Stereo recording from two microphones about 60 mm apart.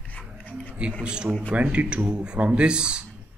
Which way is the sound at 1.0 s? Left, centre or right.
Centre.